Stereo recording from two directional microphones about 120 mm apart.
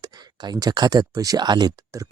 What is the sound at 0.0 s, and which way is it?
Speech, 35° right (ahead or behind).